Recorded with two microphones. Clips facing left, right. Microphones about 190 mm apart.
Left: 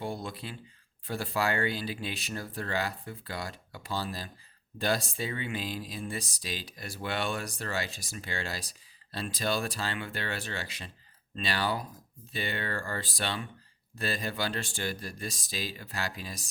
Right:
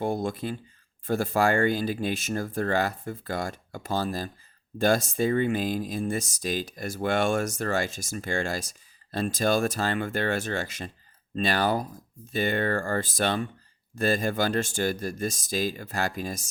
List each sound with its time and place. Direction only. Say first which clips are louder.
0.0 s speech: right 8 dB; 45° right (ahead or behind)